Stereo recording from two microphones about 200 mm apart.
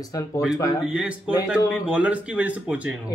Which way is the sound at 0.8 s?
5° right (ahead or behind).